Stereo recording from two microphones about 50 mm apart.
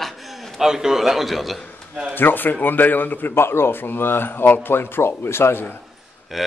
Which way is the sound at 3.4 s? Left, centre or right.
Left.